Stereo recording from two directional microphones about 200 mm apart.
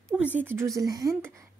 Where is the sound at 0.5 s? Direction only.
15° right (ahead or behind).